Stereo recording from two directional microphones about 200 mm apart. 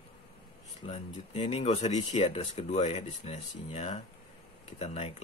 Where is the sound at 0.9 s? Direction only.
30° left (ahead or behind).